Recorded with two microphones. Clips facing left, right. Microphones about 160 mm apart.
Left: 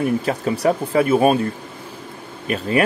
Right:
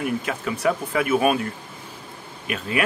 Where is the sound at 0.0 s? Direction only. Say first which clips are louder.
Left 6 dB; 35° left (ahead or behind).